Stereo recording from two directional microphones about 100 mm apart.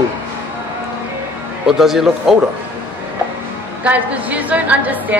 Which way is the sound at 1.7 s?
5° right (ahead or behind).